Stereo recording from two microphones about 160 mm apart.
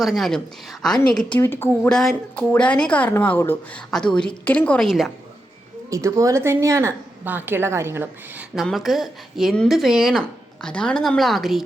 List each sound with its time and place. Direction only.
0.0 s speech: centre (ahead or behind)
5.9 s a woman's voice: 20° right (ahead or behind); by 11.6 s centre (ahead or behind)